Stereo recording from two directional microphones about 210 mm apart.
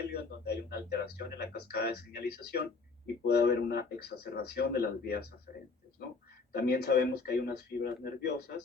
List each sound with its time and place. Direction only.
0.1 s speech: 50° left (ahead or behind)
6.5 s speech: 50° left (ahead or behind)